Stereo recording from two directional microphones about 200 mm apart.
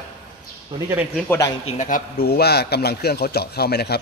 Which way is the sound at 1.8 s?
45° left (ahead or behind).